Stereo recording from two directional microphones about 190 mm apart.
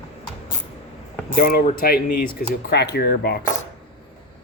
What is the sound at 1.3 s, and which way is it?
Speech, 50° left (ahead or behind).